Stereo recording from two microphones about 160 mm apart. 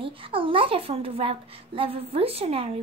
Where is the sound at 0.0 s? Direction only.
35° right (ahead or behind).